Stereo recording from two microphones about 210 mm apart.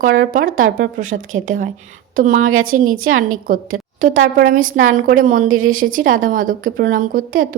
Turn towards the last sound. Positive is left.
turn(degrees=-40)  # may be behind; listen again after turning